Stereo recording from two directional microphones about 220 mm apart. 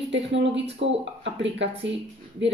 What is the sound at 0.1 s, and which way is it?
Speech, 55° right (ahead or behind).